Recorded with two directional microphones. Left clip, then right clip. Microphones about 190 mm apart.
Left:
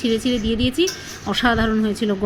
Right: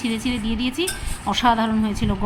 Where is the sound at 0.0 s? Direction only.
10° left (ahead or behind).